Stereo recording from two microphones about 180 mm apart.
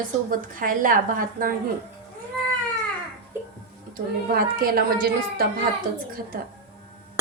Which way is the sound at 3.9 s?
55° right (ahead or behind).